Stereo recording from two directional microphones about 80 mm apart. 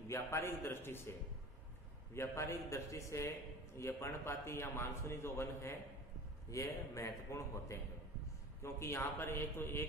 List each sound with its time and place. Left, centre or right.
0.1 s a man's voice: left
2.1 s a man's voice: left